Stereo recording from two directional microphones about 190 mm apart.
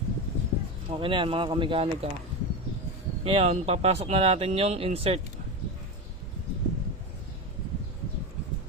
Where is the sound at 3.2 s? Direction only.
30° right (ahead or behind).